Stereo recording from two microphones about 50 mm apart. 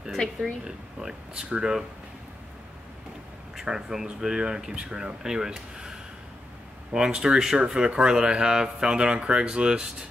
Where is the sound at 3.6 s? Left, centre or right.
Centre.